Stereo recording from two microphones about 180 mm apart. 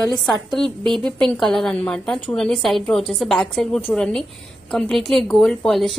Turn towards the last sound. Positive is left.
turn(degrees=0)  # may be behind; listen again after turning